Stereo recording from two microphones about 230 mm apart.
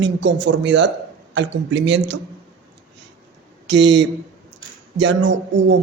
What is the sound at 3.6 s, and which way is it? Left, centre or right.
Speech, right.